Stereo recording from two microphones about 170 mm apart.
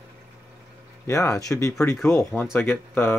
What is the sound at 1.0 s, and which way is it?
Speech, 15° left (ahead or behind).